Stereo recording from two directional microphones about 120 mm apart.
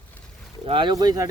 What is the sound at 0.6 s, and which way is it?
Speech, 45° right (ahead or behind).